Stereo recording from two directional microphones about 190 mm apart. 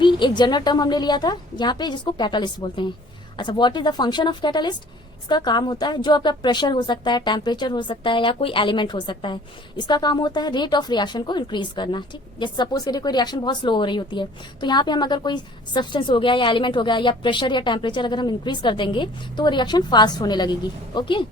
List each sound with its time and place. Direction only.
0.0 s a woman's voice: 25° left (ahead or behind)